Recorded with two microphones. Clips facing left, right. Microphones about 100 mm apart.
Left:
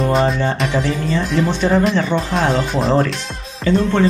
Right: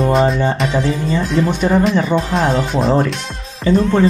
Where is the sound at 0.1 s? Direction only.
Centre (ahead or behind).